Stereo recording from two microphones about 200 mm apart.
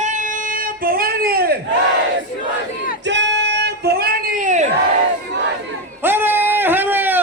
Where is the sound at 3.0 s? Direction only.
65° right (ahead or behind); by 4.6 s 40° right (ahead or behind).